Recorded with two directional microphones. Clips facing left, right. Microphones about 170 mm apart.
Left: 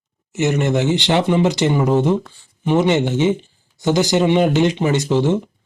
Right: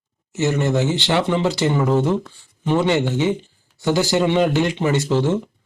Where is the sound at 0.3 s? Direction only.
20° left (ahead or behind).